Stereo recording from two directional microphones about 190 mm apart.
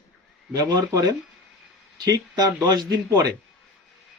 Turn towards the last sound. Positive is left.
turn(degrees=-20)  # may be behind; listen again after turning